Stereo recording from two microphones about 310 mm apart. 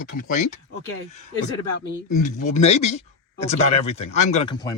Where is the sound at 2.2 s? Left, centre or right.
Left.